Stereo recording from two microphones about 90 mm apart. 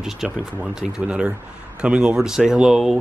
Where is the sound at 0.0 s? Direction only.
5° right (ahead or behind).